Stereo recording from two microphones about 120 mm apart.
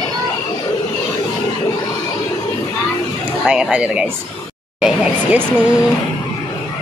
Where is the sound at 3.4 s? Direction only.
5° right (ahead or behind).